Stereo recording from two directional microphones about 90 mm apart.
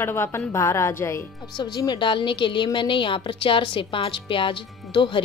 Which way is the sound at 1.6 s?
55° left (ahead or behind).